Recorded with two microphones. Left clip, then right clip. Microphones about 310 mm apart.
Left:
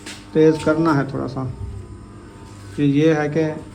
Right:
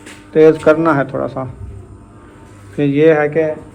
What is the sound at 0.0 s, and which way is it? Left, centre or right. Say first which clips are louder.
Speech: right 6 dB; centre.